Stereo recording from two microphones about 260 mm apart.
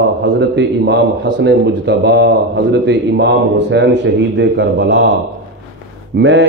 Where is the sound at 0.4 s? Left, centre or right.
Right.